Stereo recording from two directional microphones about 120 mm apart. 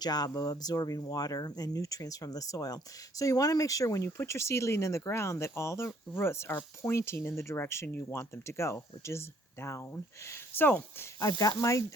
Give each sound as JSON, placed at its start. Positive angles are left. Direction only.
{"t": 0.0, "sound": "speech", "side_deg": 35}